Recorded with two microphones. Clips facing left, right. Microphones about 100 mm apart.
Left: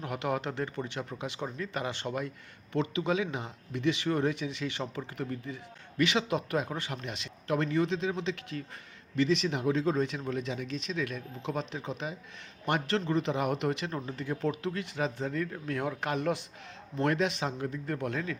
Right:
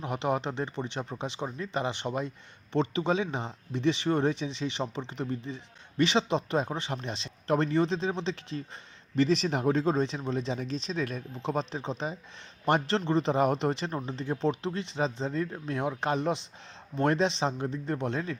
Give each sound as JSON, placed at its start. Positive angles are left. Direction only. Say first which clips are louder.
{"t": 0.0, "sound": "speech", "louder": "right 3 dB", "side_deg": -25}